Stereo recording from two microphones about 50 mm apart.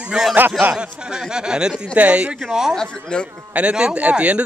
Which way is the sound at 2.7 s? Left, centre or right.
Centre.